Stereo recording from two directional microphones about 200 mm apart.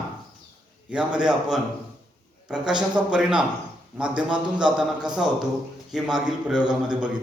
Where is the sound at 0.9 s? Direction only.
5° right (ahead or behind).